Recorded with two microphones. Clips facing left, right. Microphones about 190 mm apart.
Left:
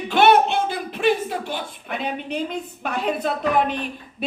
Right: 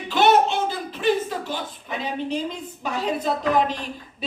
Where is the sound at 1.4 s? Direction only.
60° left (ahead or behind).